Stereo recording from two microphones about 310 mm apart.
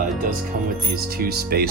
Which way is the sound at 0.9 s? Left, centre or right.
Right.